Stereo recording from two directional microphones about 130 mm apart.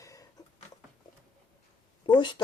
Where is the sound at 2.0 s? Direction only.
40° left (ahead or behind).